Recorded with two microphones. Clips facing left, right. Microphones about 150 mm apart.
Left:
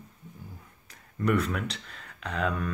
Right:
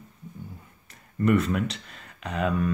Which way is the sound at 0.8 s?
Centre (ahead or behind).